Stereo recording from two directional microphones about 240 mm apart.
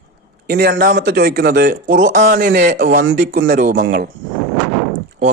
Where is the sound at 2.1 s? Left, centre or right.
Right.